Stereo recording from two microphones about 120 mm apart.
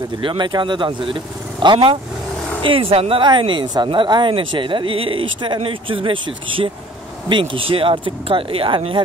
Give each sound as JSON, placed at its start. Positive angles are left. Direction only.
{"t": 0.2, "sound": "speech", "side_deg": -40}